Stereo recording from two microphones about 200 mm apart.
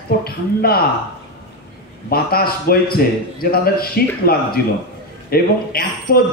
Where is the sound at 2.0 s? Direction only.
50° left (ahead or behind).